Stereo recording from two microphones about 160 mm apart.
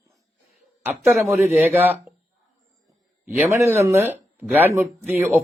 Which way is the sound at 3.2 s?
15° right (ahead or behind).